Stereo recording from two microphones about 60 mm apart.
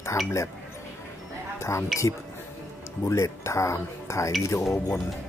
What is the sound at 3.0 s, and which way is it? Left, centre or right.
Speech, left.